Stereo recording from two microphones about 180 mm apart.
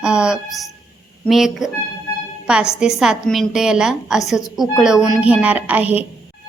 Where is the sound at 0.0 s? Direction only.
5° right (ahead or behind).